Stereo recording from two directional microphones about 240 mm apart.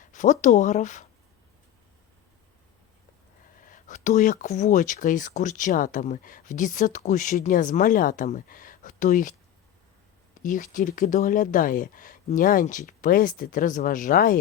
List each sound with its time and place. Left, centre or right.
0.0 s speech: left
3.7 s speech: left
10.4 s speech: left